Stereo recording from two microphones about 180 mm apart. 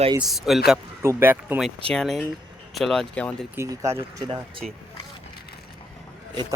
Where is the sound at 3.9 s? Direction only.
30° right (ahead or behind).